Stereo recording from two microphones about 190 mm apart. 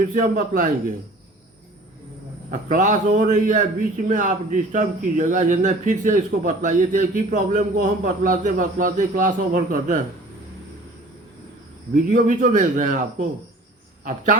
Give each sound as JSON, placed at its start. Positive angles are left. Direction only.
{"t": 0.1, "sound": "a man's voice", "side_deg": -45}
{"t": 2.5, "sound": "a man's voice", "side_deg": -40}
{"t": 12.1, "sound": "a man's voice", "side_deg": -45}